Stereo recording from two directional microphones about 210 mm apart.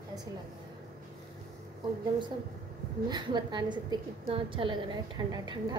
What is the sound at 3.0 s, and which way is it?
A woman's voice, 20° right (ahead or behind).